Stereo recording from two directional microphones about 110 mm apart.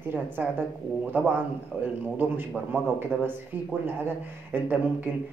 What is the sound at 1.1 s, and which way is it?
A man's voice, 15° right (ahead or behind).